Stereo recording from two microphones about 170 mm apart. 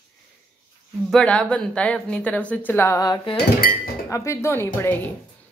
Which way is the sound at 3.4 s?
60° left (ahead or behind).